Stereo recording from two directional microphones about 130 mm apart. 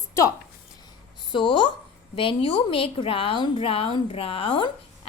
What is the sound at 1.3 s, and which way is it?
A woman's voice, 40° left (ahead or behind).